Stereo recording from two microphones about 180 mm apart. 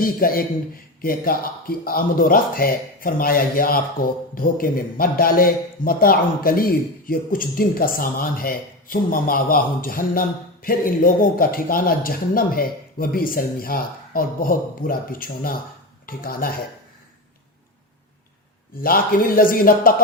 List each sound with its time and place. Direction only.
0.0 s speech: 55° left (ahead or behind)
18.8 s speech: 55° left (ahead or behind)